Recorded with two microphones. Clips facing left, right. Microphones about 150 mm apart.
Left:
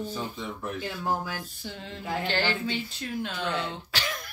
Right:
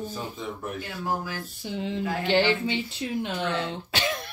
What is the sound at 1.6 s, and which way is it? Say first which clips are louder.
Speech: right 8 dB; 15° right (ahead or behind).